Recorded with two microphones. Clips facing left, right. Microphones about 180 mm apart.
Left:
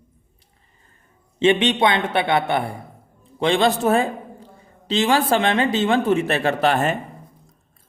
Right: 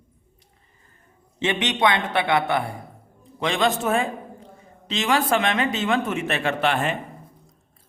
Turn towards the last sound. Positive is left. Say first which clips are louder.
# left 4 dB
turn(degrees=40)  # may be behind; listen again after turning